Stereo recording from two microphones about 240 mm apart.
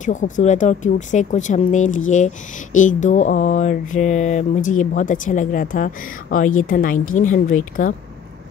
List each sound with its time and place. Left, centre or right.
0.0 s speech: left